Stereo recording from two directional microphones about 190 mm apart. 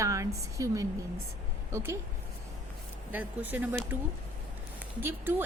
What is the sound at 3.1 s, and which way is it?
Speech, 10° right (ahead or behind).